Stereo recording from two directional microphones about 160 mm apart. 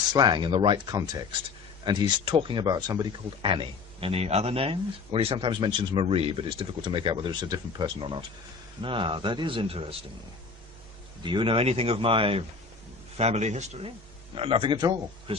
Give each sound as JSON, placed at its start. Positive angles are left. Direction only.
{"t": 0.1, "sound": "speech", "side_deg": -25}
{"t": 11.2, "sound": "speech", "side_deg": -30}